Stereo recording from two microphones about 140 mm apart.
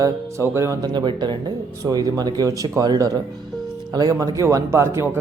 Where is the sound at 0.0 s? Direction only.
20° right (ahead or behind).